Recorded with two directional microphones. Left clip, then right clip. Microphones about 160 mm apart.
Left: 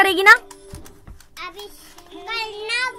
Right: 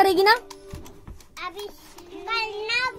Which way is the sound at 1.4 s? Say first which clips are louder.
Even; 30° right (ahead or behind).